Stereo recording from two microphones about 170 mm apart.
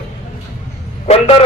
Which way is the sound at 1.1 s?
40° left (ahead or behind).